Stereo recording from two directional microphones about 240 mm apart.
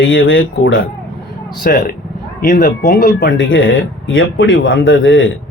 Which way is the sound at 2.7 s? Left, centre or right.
Left.